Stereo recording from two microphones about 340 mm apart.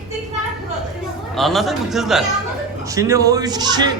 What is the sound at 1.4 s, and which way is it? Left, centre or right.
A man's voice, centre.